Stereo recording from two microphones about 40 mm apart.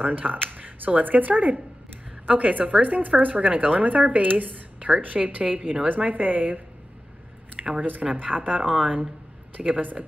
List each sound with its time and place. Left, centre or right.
0.0 s speech: right
7.5 s a sound: right
8.1 s speech: right